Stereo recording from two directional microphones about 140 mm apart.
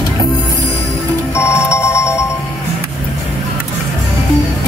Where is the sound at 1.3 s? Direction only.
20° left (ahead or behind).